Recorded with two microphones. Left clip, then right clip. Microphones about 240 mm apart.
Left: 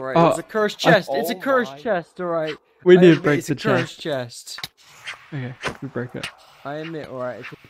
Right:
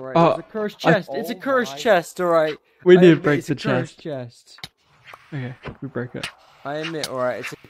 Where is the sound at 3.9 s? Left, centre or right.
Left.